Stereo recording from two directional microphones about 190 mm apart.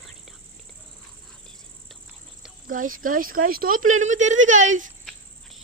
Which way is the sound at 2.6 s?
45° right (ahead or behind).